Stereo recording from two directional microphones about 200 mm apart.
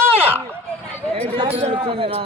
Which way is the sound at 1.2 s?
25° right (ahead or behind).